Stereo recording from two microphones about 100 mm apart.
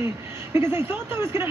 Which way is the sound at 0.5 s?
25° right (ahead or behind).